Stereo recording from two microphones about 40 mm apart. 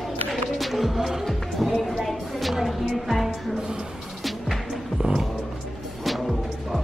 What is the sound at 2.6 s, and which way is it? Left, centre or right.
Music, centre.